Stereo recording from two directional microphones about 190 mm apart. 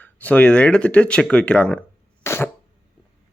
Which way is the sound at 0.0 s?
10° left (ahead or behind).